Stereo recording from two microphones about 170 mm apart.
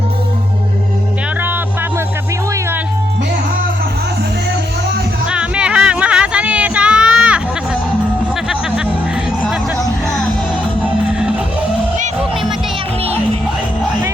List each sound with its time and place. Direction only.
5.3 s music: 5° right (ahead or behind)